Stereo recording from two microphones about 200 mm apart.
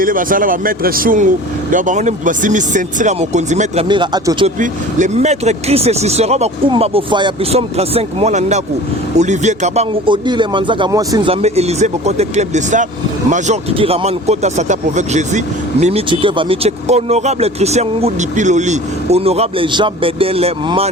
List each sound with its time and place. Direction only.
0.0 s speech: 45° right (ahead or behind)
3.8 s a man's voice: 25° right (ahead or behind)
4.4 s a man's voice: 40° right (ahead or behind); by 11.2 s 20° right (ahead or behind)
11.3 s speech: 30° right (ahead or behind)